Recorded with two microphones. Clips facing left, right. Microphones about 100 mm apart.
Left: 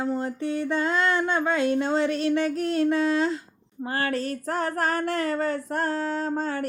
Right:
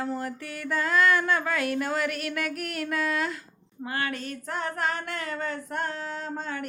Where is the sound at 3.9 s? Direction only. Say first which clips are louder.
Left 5 dB; 35° left (ahead or behind).